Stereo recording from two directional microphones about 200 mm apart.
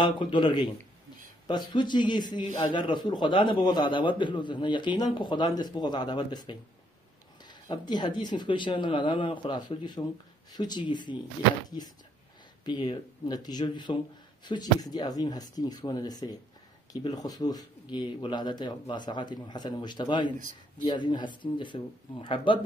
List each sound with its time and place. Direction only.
0.0 s a man's voice: 25° left (ahead or behind)
12.6 s a man's voice: 25° left (ahead or behind)